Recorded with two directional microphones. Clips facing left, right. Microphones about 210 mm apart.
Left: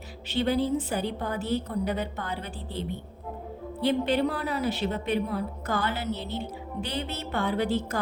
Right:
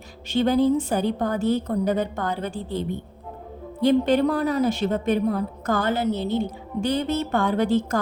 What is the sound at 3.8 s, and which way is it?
A woman's voice, 45° right (ahead or behind).